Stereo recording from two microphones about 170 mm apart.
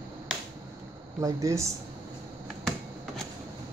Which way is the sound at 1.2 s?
20° right (ahead or behind).